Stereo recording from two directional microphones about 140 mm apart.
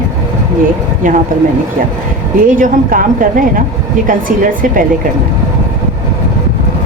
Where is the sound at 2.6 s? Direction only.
75° right (ahead or behind).